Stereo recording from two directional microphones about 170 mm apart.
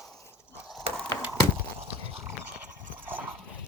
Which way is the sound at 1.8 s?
35° right (ahead or behind).